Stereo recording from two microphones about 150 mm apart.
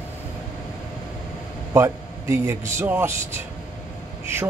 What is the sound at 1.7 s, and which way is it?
A man's voice, 20° right (ahead or behind).